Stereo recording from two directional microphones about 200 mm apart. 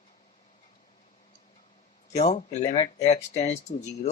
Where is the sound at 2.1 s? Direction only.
35° left (ahead or behind).